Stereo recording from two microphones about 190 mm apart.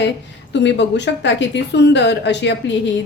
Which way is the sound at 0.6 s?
70° left (ahead or behind).